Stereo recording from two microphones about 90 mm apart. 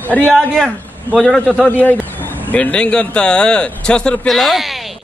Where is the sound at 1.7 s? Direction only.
20° left (ahead or behind); by 4.8 s centre (ahead or behind).